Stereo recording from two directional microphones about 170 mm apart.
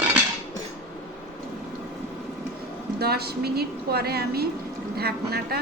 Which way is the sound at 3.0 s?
70° right (ahead or behind).